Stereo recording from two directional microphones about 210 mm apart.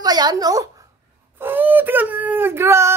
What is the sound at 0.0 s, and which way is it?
A woman's voice, 20° right (ahead or behind).